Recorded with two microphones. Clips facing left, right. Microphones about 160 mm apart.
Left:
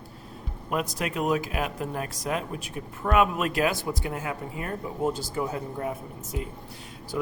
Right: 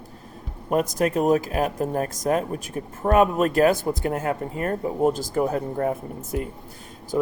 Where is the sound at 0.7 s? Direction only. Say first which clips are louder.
Right 7 dB; 45° right (ahead or behind).